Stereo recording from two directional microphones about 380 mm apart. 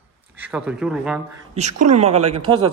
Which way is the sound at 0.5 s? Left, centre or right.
Centre.